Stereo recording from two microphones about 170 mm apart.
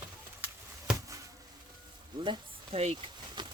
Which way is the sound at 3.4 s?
25° right (ahead or behind).